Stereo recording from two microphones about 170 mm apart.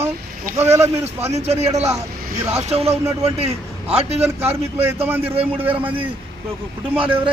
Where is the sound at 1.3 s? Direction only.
40° right (ahead or behind).